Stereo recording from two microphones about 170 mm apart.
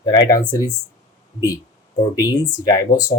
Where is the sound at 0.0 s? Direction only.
25° left (ahead or behind).